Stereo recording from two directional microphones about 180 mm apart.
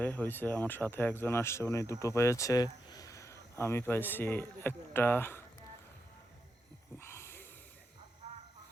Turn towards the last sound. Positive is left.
turn(degrees=15)  # may be behind; listen again after turning